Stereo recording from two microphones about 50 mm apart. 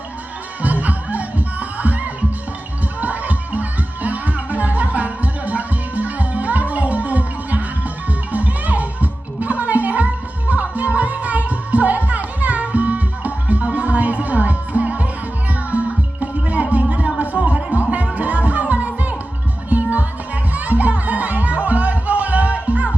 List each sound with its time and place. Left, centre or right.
0.6 s music: right
17.4 s a sound: centre
17.9 s music: right